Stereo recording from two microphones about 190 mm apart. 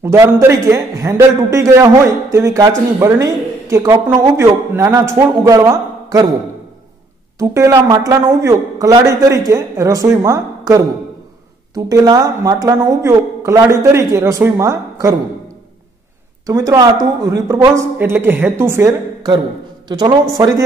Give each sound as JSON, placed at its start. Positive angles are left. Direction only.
{"t": 0.0, "sound": "speech", "side_deg": -10}
{"t": 7.3, "sound": "speech", "side_deg": -15}
{"t": 16.4, "sound": "speech", "side_deg": -20}